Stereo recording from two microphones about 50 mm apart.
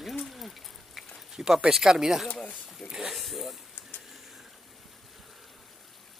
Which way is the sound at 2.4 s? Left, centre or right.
Centre.